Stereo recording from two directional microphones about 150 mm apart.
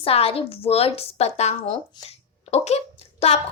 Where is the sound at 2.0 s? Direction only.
45° left (ahead or behind).